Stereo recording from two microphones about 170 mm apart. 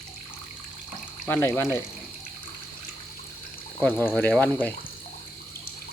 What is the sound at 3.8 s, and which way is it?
Speech, 10° left (ahead or behind).